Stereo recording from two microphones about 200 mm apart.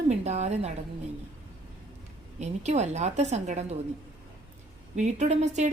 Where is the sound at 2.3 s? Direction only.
35° right (ahead or behind).